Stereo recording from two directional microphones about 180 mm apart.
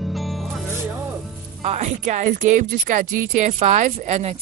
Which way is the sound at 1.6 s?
40° right (ahead or behind).